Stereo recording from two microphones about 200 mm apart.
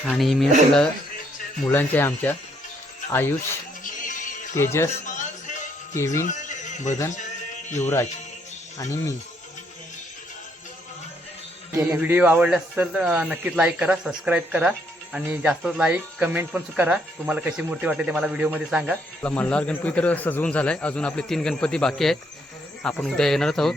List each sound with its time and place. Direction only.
0.0 s a man's voice: centre (ahead or behind)
1.6 s speech: 10° left (ahead or behind)
3.8 s music: 40° left (ahead or behind)
4.5 s speech: 15° left (ahead or behind)
5.0 s music: 40° left (ahead or behind)
7.8 s speech: 15° left (ahead or behind)
11.9 s a man's voice: 10° right (ahead or behind)
19.2 s a man's voice: 5° left (ahead or behind)